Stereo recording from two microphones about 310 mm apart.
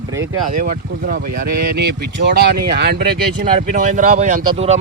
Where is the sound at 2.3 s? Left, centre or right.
Right.